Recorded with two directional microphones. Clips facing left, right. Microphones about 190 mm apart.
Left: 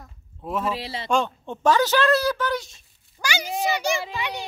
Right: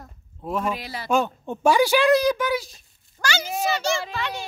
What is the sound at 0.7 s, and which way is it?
Speech, 25° left (ahead or behind).